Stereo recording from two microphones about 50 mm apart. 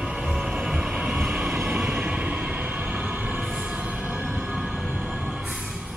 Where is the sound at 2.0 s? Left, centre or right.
Right.